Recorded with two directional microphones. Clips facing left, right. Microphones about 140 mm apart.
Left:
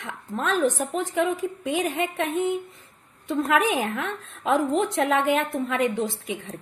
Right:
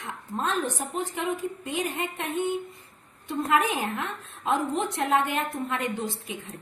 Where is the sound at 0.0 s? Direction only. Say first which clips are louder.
Left 2 dB; 90° left.